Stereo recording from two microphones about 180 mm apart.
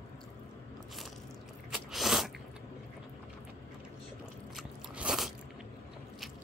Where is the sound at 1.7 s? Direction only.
Centre (ahead or behind).